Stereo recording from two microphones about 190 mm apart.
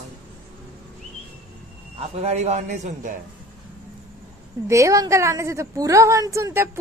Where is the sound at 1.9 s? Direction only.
35° right (ahead or behind).